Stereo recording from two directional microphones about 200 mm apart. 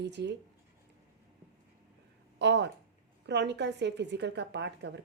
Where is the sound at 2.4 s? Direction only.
60° right (ahead or behind).